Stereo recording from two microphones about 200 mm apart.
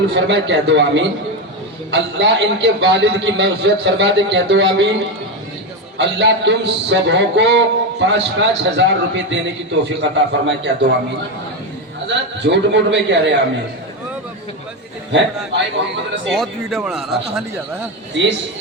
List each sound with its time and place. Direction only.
0.1 s speech: 60° right (ahead or behind)
6.0 s speech: 60° right (ahead or behind)
12.0 s speech: 65° right (ahead or behind)
16.3 s speech: centre (ahead or behind)
18.2 s speech: 60° right (ahead or behind)